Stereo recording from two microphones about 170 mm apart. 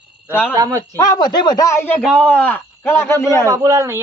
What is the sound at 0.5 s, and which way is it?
Speech, 20° right (ahead or behind).